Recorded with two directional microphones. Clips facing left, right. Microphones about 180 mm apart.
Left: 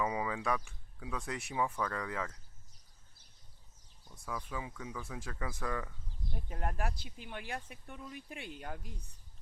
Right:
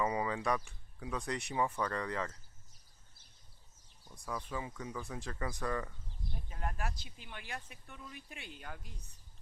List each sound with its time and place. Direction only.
0.0 s speech: centre (ahead or behind)
4.3 s speech: centre (ahead or behind)
6.5 s speech: 50° left (ahead or behind)